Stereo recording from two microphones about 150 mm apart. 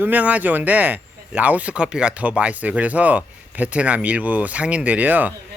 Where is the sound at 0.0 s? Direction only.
10° right (ahead or behind).